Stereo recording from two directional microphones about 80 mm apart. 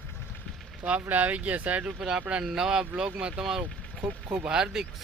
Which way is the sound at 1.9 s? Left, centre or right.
Centre.